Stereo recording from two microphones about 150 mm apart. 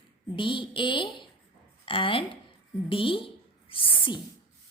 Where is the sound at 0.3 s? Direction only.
35° left (ahead or behind).